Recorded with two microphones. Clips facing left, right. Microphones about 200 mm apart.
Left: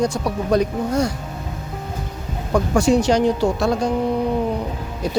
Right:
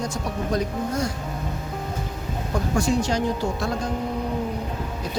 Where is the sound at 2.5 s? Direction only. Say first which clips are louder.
Left 7 dB; 75° left (ahead or behind).